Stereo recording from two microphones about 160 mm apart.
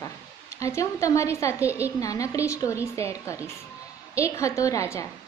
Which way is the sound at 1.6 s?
10° right (ahead or behind).